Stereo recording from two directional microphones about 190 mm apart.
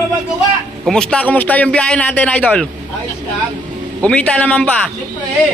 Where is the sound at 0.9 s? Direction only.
5° left (ahead or behind).